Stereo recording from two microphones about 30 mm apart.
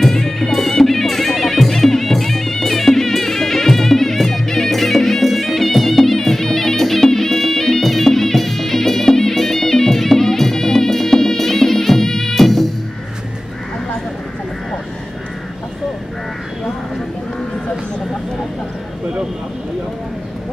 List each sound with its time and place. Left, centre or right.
0.1 s music: centre